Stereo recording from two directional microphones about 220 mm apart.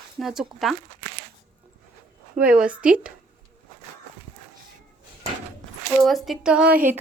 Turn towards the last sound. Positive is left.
turn(degrees=-5)  # may be behind; listen again after turning